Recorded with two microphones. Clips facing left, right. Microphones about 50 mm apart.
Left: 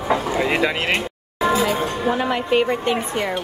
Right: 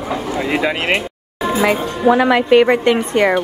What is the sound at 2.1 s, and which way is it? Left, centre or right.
Speech, right.